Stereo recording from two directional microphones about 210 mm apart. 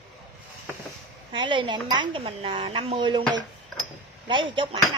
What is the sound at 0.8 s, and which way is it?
Speech, 20° right (ahead or behind).